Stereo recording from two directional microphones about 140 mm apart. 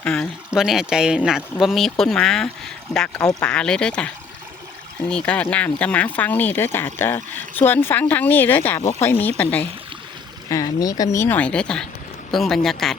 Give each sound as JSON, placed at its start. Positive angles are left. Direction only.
{"t": 0.0, "sound": "speech", "side_deg": 5}
{"t": 5.1, "sound": "speech", "side_deg": 10}
{"t": 10.5, "sound": "speech", "side_deg": 25}